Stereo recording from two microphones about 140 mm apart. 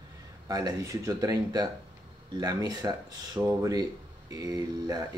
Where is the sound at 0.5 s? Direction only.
25° right (ahead or behind).